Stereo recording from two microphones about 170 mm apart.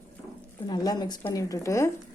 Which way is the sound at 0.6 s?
25° left (ahead or behind).